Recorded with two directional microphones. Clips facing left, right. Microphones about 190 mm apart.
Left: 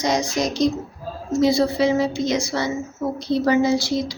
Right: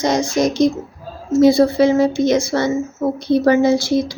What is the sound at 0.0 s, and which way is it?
Speech, 55° right (ahead or behind).